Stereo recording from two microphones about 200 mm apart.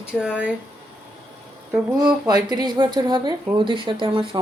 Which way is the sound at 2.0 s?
20° right (ahead or behind).